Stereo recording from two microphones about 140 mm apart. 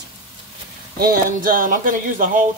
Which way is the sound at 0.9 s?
90° right.